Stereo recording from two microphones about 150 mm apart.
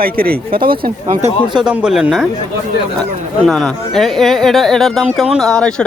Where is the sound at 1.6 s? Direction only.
5° right (ahead or behind).